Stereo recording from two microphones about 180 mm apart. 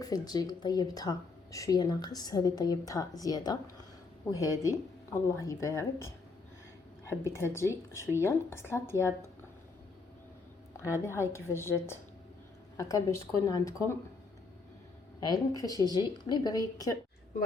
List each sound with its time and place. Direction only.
0.0 s a woman's voice: 20° left (ahead or behind)
7.1 s a woman's voice: 15° left (ahead or behind)
10.8 s a woman's voice: 15° left (ahead or behind)
15.2 s speech: 20° left (ahead or behind)